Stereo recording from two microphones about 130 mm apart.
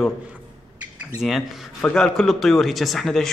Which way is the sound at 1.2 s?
Centre (ahead or behind).